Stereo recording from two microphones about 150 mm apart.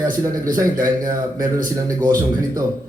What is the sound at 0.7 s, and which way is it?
Speech, 65° right (ahead or behind).